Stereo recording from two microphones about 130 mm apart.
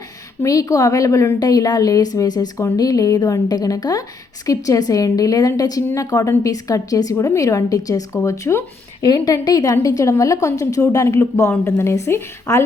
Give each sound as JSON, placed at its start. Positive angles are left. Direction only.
{"t": 0.4, "sound": "a woman's voice", "side_deg": 25}
{"t": 9.0, "sound": "a woman's voice", "side_deg": 30}